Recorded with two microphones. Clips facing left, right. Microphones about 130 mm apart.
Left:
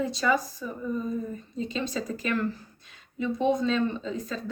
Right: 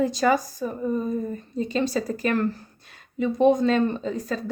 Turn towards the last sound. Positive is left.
turn(degrees=-50)  # may be behind; listen again after turning